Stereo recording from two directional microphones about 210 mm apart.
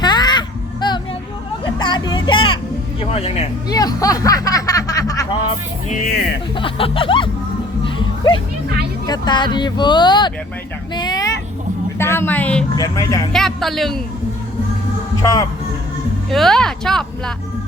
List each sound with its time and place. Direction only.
0.0 s a sound: 20° left (ahead or behind)
1.6 s vehicle: 20° left (ahead or behind)
3.0 s speech: 30° left (ahead or behind)
3.7 s a sound: 20° left (ahead or behind)
6.6 s speech: 25° left (ahead or behind)
7.9 s a sound: 25° left (ahead or behind)
9.0 s speech: 20° left (ahead or behind)
10.9 s vehicle: 20° left (ahead or behind)
11.9 s speech: 10° left (ahead or behind)
13.3 s speech: centre (ahead or behind)
15.2 s speech: 15° left (ahead or behind)
16.3 s speech: centre (ahead or behind)